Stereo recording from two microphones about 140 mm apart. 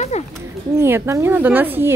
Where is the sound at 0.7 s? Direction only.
20° right (ahead or behind).